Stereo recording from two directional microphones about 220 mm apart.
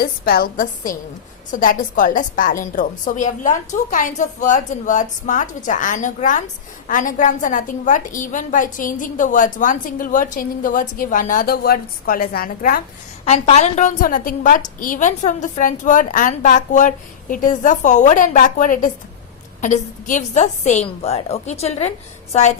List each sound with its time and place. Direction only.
0.0 s a woman's voice: 40° left (ahead or behind)
13.2 s a woman's voice: 30° left (ahead or behind)